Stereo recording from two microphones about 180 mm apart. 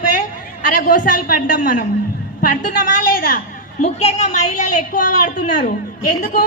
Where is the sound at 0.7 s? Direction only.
50° left (ahead or behind).